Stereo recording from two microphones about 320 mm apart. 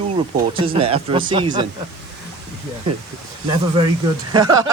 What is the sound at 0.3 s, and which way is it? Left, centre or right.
Speech, centre.